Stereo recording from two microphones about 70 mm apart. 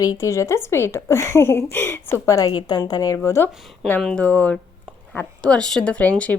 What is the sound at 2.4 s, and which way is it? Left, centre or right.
Speech, left.